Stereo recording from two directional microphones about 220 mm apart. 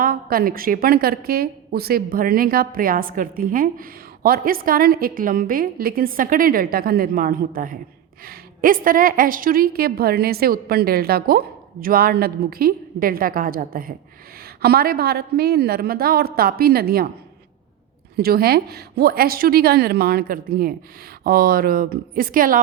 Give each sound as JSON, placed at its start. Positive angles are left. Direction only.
{"t": 0.0, "sound": "a woman's voice", "side_deg": -40}
{"t": 18.2, "sound": "a woman's voice", "side_deg": -45}